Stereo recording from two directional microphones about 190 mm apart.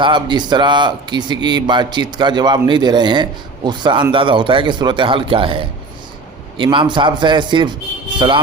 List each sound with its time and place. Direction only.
0.0 s speech: 25° right (ahead or behind)